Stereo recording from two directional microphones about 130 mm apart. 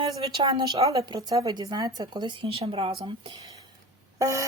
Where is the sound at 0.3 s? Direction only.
30° right (ahead or behind); by 3.3 s 45° right (ahead or behind).